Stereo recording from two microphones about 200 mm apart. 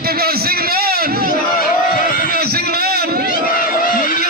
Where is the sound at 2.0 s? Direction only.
45° left (ahead or behind).